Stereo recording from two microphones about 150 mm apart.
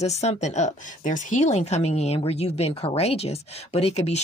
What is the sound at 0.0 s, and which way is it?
Speech, 45° left (ahead or behind).